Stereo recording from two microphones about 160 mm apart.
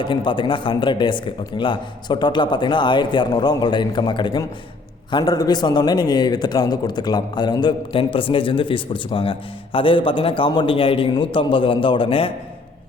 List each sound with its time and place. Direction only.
0.0 s a man's voice: 30° left (ahead or behind)